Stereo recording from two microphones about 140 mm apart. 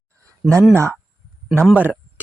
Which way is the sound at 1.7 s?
10° right (ahead or behind).